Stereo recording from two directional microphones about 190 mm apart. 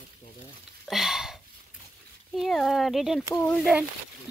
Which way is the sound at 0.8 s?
Centre (ahead or behind).